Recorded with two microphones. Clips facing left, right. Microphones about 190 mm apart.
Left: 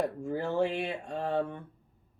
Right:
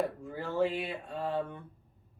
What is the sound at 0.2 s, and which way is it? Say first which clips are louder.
Speech: left 5 dB; 45° left (ahead or behind).